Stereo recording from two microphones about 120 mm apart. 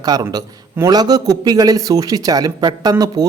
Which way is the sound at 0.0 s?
30° right (ahead or behind).